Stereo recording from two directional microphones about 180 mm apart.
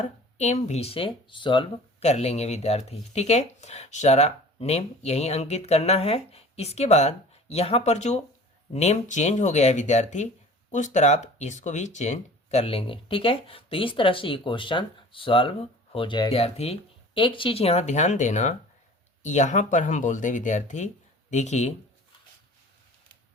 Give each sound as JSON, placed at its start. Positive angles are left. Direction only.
{"t": 0.0, "sound": "speech", "side_deg": 40}